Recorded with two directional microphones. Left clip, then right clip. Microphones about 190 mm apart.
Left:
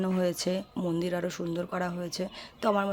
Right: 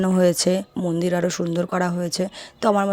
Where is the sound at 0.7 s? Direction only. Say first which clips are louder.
Right 8 dB; 25° right (ahead or behind).